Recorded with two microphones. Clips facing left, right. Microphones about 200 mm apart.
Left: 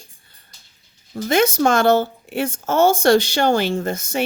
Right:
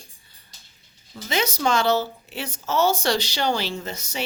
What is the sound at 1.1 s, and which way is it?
Speech, 50° left (ahead or behind).